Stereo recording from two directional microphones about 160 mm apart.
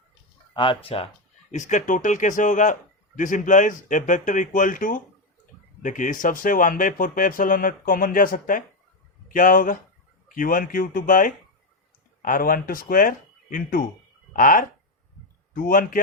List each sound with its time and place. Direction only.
0.5 s speech: 30° left (ahead or behind)
1.5 s speech: 50° left (ahead or behind)